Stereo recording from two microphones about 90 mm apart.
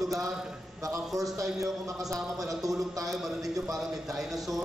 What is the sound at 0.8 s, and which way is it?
A man's voice, 40° right (ahead or behind).